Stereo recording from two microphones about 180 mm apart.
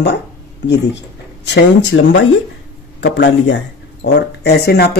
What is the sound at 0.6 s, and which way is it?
Speech, 75° left (ahead or behind).